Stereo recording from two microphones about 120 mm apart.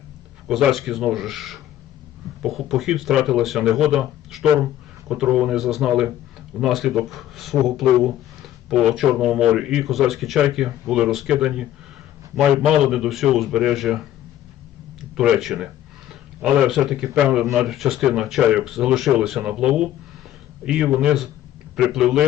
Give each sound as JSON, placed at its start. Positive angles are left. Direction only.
{"t": 0.4, "sound": "speech", "side_deg": -5}
{"t": 15.1, "sound": "speech", "side_deg": -5}